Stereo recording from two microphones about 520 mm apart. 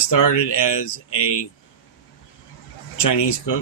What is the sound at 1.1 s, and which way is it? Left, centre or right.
Speech, left.